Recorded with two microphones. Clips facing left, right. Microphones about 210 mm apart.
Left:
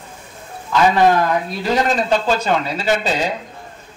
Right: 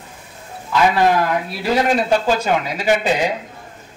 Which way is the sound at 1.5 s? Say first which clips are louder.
Right 1 dB; 10° right (ahead or behind).